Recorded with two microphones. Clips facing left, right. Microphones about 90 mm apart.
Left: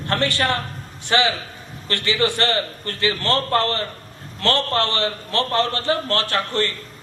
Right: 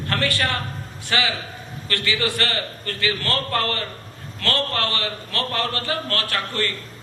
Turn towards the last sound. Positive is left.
turn(degrees=25)  # may be behind; listen again after turning